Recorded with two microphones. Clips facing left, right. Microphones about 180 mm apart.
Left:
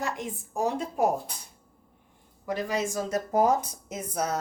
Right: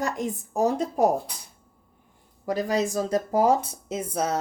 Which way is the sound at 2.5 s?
35° right (ahead or behind).